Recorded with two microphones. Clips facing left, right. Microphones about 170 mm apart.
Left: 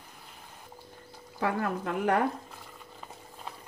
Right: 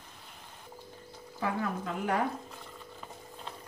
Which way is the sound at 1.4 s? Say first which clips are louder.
Left 3 dB; 60° left (ahead or behind).